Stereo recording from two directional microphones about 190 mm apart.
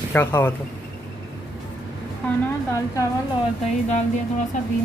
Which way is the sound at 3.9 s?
40° left (ahead or behind).